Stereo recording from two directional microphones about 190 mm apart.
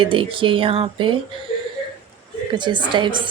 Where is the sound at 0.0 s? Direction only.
25° right (ahead or behind).